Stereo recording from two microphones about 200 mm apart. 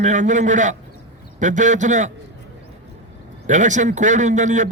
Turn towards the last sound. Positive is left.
turn(degrees=-40)  # may be behind; listen again after turning